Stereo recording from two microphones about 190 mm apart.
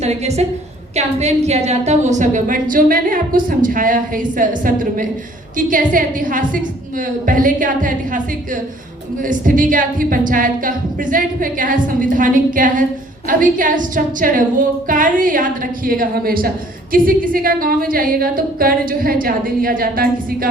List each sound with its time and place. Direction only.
0.0 s a woman's voice: 35° right (ahead or behind)
9.2 s a woman's voice: 45° right (ahead or behind)